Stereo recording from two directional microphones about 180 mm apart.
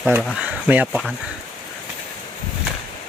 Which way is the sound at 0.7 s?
10° right (ahead or behind).